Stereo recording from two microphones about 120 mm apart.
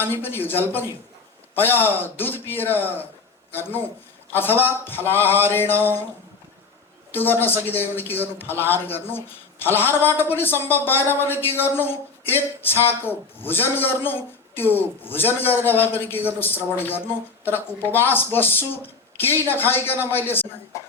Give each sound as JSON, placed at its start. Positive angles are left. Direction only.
{"t": 0.0, "sound": "a man's voice", "side_deg": 20}
{"t": 7.1, "sound": "a man's voice", "side_deg": 15}